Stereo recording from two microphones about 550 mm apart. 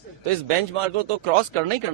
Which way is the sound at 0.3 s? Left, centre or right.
Right.